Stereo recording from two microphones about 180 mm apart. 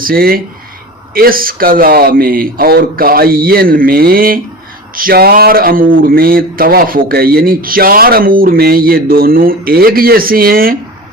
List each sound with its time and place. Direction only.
0.0 s speech: 55° right (ahead or behind)